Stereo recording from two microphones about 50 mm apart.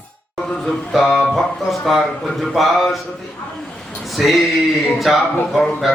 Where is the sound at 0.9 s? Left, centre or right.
Centre.